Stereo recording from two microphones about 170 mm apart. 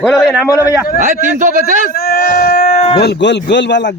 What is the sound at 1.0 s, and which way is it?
Speech, 45° right (ahead or behind).